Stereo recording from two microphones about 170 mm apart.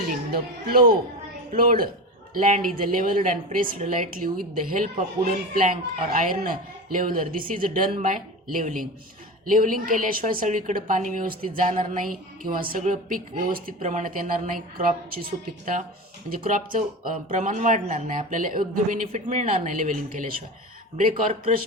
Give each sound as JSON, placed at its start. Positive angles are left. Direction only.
{"t": 0.1, "sound": "a woman's voice", "side_deg": -60}